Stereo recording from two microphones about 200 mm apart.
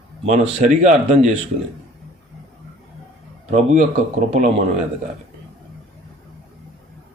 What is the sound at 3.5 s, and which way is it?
Speech, 35° right (ahead or behind).